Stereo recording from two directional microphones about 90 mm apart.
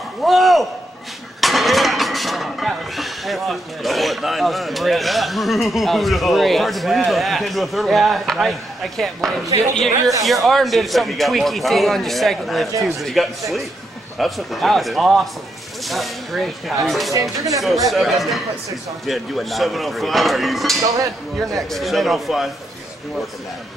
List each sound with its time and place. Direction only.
0.2 s a sound: centre (ahead or behind)
1.4 s speech: centre (ahead or behind)
17.1 s speech: 35° right (ahead or behind)
17.6 s speech: centre (ahead or behind)